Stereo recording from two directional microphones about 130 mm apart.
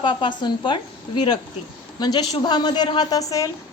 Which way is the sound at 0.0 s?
40° left (ahead or behind).